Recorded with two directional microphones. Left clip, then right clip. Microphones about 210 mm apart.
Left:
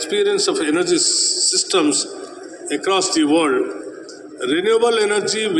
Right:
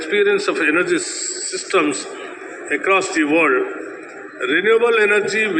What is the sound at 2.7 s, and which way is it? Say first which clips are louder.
A man's voice: right 2 dB; 60° left (ahead or behind).